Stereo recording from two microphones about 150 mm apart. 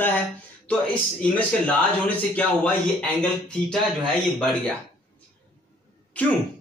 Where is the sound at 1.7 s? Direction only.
10° left (ahead or behind).